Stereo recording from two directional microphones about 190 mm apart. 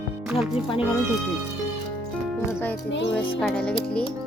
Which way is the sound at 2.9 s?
70° left (ahead or behind).